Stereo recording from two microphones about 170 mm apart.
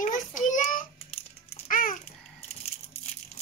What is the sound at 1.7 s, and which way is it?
Babbling, 55° left (ahead or behind).